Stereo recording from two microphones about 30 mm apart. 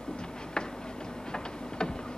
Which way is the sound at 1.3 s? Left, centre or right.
Left.